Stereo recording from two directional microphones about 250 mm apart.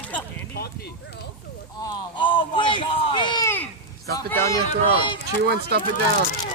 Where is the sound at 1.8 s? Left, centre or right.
Centre.